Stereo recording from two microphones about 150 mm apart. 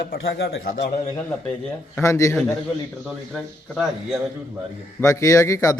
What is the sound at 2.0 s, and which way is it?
Speech, 20° left (ahead or behind).